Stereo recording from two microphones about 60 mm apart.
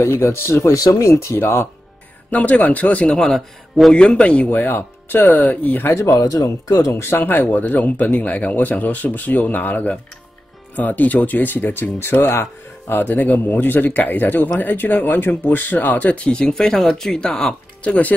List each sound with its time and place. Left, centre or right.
0.0 s speech: left
0.7 s speech: left
1.4 s speech: left
2.3 s speech: left
3.2 s a man's voice: centre
4.5 s speech: left
5.9 s speech: left
6.1 s speech: left
7.0 s speech: left; by 17.6 s centre
17.8 s speech: left